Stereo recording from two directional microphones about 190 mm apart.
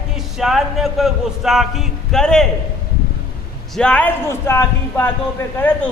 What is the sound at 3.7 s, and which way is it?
Speech, 5° left (ahead or behind).